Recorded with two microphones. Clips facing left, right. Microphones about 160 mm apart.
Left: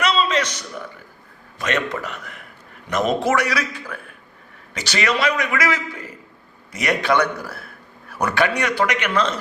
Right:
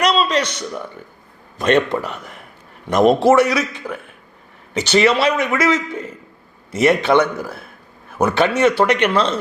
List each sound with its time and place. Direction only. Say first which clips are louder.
0.0 s a sound: right 3 dB; 40° right (ahead or behind)
1.5 s speech: right 8 dB; 35° right (ahead or behind)
3.5 s a man's voice: right 4 dB; 25° right (ahead or behind)